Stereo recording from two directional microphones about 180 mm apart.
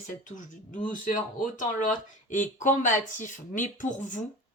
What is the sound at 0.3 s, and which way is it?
Speech, 45° left (ahead or behind).